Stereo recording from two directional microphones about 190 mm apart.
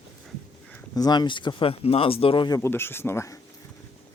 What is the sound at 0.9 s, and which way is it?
Speech, 20° left (ahead or behind).